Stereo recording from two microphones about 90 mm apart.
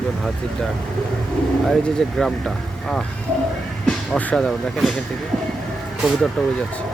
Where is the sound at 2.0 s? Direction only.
5° left (ahead or behind).